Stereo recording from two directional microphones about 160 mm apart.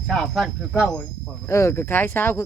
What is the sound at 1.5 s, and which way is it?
Speech, 15° left (ahead or behind).